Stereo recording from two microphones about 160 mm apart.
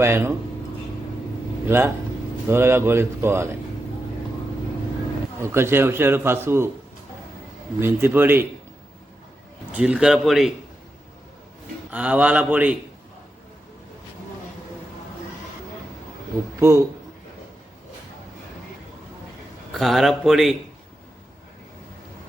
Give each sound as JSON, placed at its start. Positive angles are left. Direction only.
{"t": 0.0, "sound": "a man's voice", "side_deg": -15}
{"t": 1.6, "sound": "a man's voice", "side_deg": -15}
{"t": 5.4, "sound": "a man's voice", "side_deg": -15}
{"t": 7.8, "sound": "a man's voice", "side_deg": -15}
{"t": 9.7, "sound": "speech", "side_deg": -5}
{"t": 11.9, "sound": "a man's voice", "side_deg": -10}
{"t": 16.6, "sound": "a man's voice", "side_deg": -20}
{"t": 19.8, "sound": "speech", "side_deg": 0}